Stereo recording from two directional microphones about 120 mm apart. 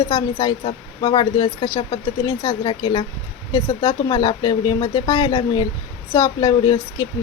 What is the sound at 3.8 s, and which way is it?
Speech, 30° left (ahead or behind).